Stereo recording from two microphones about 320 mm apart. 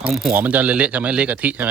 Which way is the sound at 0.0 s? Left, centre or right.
Centre.